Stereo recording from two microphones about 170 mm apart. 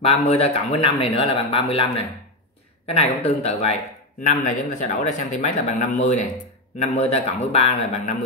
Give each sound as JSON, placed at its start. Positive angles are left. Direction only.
{"t": 0.0, "sound": "speech", "side_deg": 35}
{"t": 2.9, "sound": "speech", "side_deg": 35}